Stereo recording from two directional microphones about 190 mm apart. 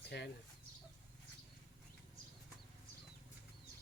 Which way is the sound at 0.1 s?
60° left (ahead or behind).